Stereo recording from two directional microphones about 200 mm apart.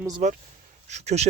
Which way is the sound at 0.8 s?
35° right (ahead or behind).